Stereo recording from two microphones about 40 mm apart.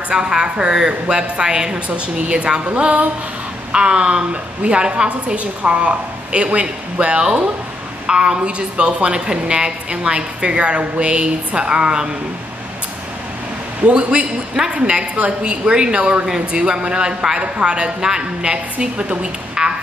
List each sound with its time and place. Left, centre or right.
0.1 s a woman's voice: centre
2.7 s a sound: right
3.7 s a woman's voice: right
13.8 s a woman's voice: right
19.6 s frog: centre